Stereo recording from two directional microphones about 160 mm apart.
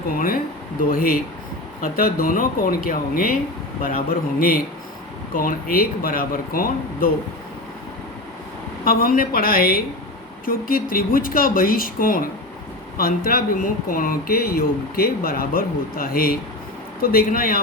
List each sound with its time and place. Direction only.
0.9 s speech: 60° left (ahead or behind)
8.8 s speech: 65° left (ahead or behind)